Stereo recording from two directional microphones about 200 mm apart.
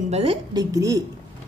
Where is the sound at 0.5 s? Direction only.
15° right (ahead or behind).